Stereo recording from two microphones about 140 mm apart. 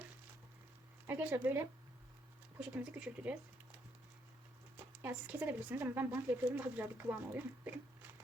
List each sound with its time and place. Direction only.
1.0 s speech: 15° right (ahead or behind)
5.0 s speech: 10° right (ahead or behind)